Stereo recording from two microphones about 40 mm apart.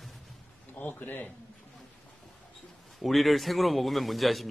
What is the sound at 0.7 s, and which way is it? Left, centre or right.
Speech, left.